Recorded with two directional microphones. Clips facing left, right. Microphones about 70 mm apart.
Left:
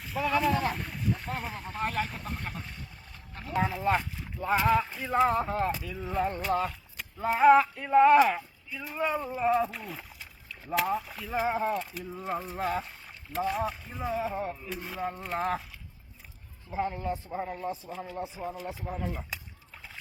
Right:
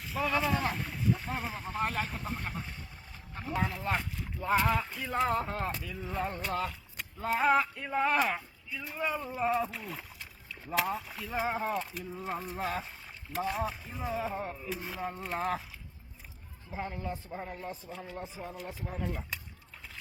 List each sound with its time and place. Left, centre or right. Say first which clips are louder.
0.0 s a sound: left 3 dB; centre
3.3 s boat: left 2 dB; centre
3.6 s speech: left 6 dB; centre
16.9 s speech: left 5 dB; left
17.9 s speech: left 4 dB; centre